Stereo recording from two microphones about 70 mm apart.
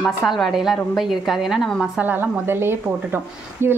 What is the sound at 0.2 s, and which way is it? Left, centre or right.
A woman's voice, centre.